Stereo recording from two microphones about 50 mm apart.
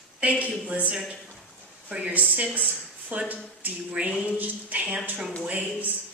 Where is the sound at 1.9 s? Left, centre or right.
Right.